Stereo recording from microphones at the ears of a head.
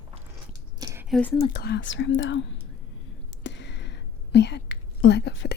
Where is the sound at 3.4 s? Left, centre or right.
Left.